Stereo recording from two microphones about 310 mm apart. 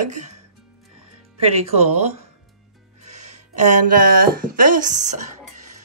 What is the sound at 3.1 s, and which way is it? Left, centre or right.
Music, right.